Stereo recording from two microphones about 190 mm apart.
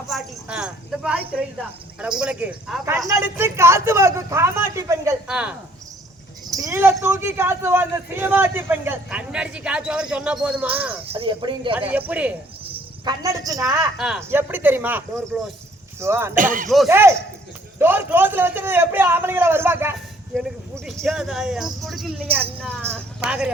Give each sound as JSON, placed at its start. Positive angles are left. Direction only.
{"t": 0.1, "sound": "a man's voice", "side_deg": -5}
{"t": 11.1, "sound": "speech", "side_deg": -30}
{"t": 11.7, "sound": "a man's voice", "side_deg": -10}
{"t": 13.1, "sound": "a man's voice", "side_deg": -20}
{"t": 16.3, "sound": "speech", "side_deg": -45}
{"t": 16.6, "sound": "speech", "side_deg": 0}
{"t": 16.9, "sound": "a man's voice", "side_deg": -10}
{"t": 20.3, "sound": "speech", "side_deg": 0}